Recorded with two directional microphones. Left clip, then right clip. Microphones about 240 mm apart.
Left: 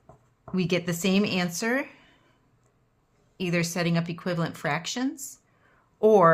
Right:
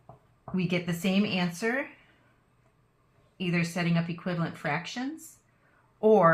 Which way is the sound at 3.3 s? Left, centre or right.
Left.